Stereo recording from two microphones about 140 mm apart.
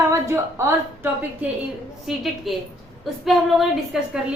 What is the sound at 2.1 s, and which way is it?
A woman's voice, centre (ahead or behind).